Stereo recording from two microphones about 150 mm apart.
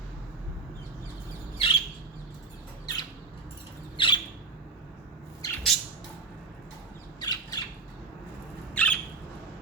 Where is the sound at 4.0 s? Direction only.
35° left (ahead or behind).